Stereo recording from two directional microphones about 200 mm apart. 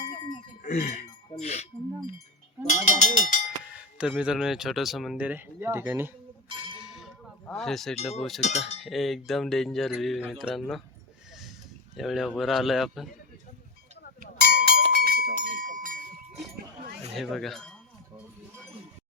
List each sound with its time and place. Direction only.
0.6 s a sound: 35° left (ahead or behind)
2.8 s speech: 40° left (ahead or behind)
3.9 s speech: 5° right (ahead or behind)
6.7 s cowbell: centre (ahead or behind)
7.9 s speech: 30° left (ahead or behind)
8.8 s speech: centre (ahead or behind)
11.9 s speech: centre (ahead or behind)
14.3 s a sound: 55° right (ahead or behind)
17.2 s speech: centre (ahead or behind)